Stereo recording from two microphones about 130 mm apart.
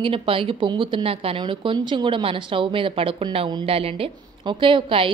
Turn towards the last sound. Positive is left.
turn(degrees=-40)  # may be behind; listen again after turning